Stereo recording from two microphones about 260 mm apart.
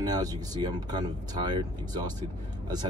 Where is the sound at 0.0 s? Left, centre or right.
Centre.